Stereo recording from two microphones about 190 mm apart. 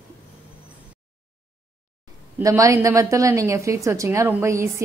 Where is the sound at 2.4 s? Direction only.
15° right (ahead or behind).